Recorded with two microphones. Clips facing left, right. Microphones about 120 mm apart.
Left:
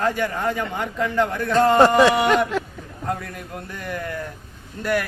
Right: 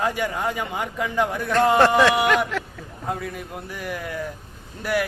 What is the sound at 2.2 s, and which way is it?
Speech, 15° left (ahead or behind).